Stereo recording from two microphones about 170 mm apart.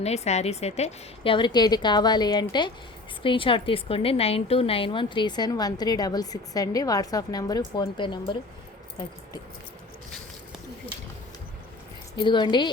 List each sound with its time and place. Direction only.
0.0 s a woman's voice: 40° left (ahead or behind)
12.1 s a woman's voice: 25° left (ahead or behind)